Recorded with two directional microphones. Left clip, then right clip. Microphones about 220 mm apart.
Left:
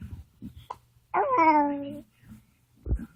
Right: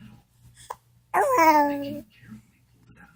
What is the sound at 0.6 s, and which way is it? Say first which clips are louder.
Plop: right 3 dB; 15° right (ahead or behind).